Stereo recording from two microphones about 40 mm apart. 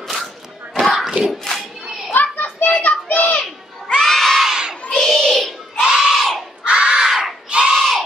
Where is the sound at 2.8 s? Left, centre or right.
Left.